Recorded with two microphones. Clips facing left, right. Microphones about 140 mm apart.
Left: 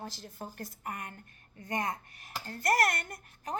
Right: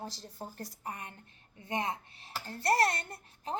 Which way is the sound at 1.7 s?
25° right (ahead or behind).